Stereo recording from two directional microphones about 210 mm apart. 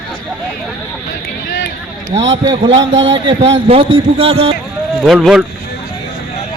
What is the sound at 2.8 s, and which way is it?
Speech, 60° right (ahead or behind).